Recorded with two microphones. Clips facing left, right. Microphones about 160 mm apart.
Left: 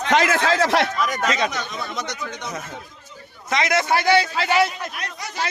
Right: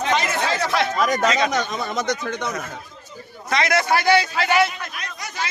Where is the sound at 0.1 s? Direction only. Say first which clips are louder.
Left 6 dB; 90° left.